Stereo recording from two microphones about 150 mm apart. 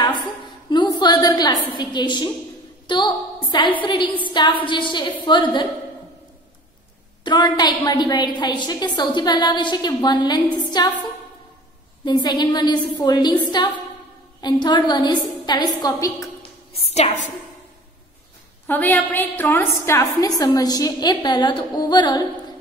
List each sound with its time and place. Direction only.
0.7 s a sound: 30° left (ahead or behind)
2.9 s a woman's voice: 30° left (ahead or behind)
4.3 s a sound: 30° left (ahead or behind)
4.6 s a woman's voice: 30° left (ahead or behind)
7.2 s a woman's voice: 30° left (ahead or behind)
12.0 s a woman's voice: 30° left (ahead or behind)
16.8 s a woman's voice: 45° left (ahead or behind)
18.7 s a woman's voice: 10° left (ahead or behind); by 22.2 s 30° left (ahead or behind)